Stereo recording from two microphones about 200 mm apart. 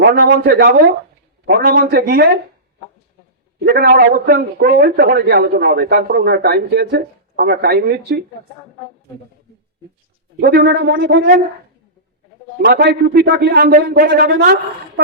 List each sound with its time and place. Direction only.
0.0 s a man's voice: 50° right (ahead or behind)
3.7 s a man's voice: 50° right (ahead or behind)
10.4 s a man's voice: 50° right (ahead or behind)
12.6 s a man's voice: 55° right (ahead or behind)